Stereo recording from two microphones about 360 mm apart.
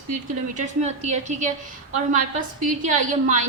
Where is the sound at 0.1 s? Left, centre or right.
Centre.